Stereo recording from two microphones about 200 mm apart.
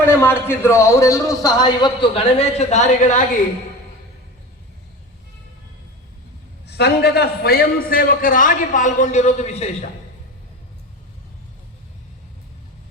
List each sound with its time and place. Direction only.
0.0 s a man's voice: 10° left (ahead or behind); by 3.2 s 40° left (ahead or behind)
6.7 s a man's voice: 55° left (ahead or behind); by 9.9 s 35° left (ahead or behind)